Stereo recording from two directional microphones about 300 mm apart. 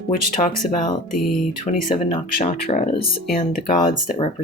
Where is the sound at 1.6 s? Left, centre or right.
Left.